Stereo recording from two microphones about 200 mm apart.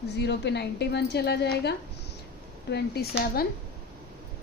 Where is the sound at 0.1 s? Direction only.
55° left (ahead or behind).